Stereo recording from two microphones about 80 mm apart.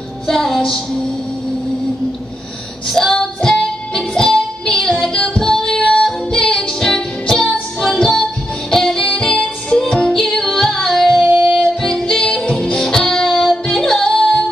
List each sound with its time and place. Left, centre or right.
0.3 s music: centre
2.9 s music: centre
11.2 s music: centre
11.8 s music: centre